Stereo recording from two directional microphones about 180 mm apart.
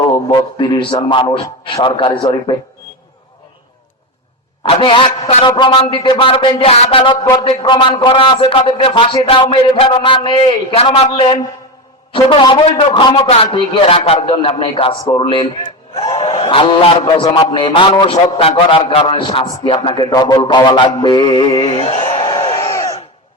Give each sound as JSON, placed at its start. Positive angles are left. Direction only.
{"t": 0.3, "sound": "a man's voice", "side_deg": 20}
{"t": 4.7, "sound": "a man's voice", "side_deg": 30}